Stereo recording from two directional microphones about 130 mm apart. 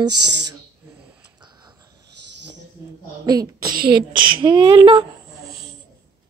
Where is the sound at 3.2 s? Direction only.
30° right (ahead or behind).